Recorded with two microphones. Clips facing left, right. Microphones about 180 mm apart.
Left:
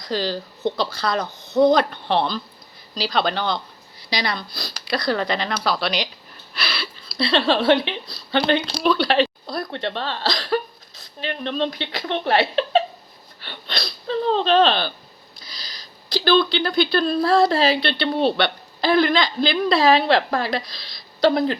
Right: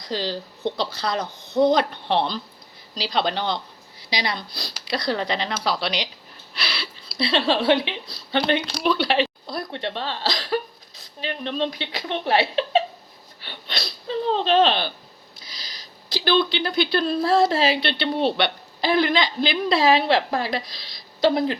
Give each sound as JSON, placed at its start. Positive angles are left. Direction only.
{"t": 0.1, "sound": "speech", "side_deg": -25}
{"t": 6.5, "sound": "gasp", "side_deg": -25}
{"t": 7.2, "sound": "speech", "side_deg": -15}
{"t": 13.4, "sound": "a sound", "side_deg": -10}
{"t": 14.1, "sound": "speech", "side_deg": -15}